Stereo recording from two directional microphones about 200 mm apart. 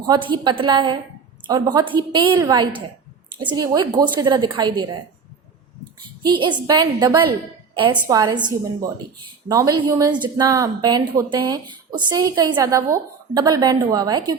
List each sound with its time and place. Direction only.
0.0 s a woman's voice: 25° right (ahead or behind)
6.2 s a woman's voice: 25° right (ahead or behind)